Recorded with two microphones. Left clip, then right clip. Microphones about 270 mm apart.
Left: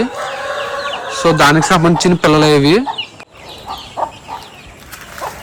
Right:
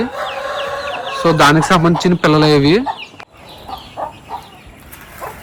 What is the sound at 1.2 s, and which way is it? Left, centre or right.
A man's voice, centre.